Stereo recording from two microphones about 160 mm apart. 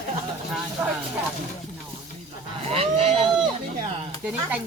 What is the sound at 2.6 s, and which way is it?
Speech, 40° right (ahead or behind).